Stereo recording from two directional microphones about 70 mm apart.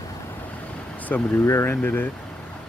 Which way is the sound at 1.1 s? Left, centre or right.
Left.